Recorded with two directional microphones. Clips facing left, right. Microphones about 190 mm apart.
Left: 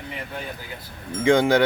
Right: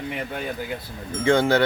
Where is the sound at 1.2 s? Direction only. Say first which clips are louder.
Left 1 dB; 15° left (ahead or behind).